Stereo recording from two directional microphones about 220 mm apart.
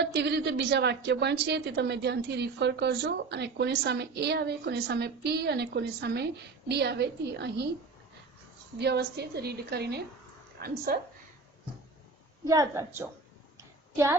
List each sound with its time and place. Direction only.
0.0 s a woman's voice: 50° right (ahead or behind)
8.8 s a woman's voice: 50° right (ahead or behind)
12.5 s a woman's voice: 15° right (ahead or behind)